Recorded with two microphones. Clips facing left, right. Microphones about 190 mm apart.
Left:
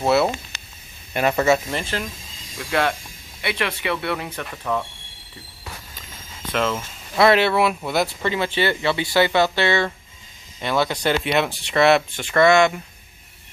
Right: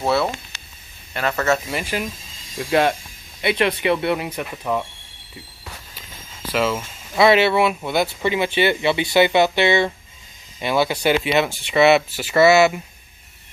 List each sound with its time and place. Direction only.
0.0 s speech: 5° left (ahead or behind)
1.1 s speech: 15° left (ahead or behind)
1.7 s speech: 10° right (ahead or behind)
6.5 s speech: 5° right (ahead or behind)
8.2 s speech: 15° right (ahead or behind)
10.6 s speech: 5° right (ahead or behind)